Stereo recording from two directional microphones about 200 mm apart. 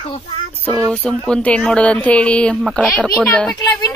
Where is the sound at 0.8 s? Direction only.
5° left (ahead or behind).